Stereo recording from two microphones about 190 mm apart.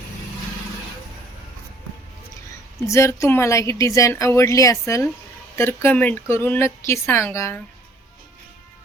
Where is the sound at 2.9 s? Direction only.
15° left (ahead or behind).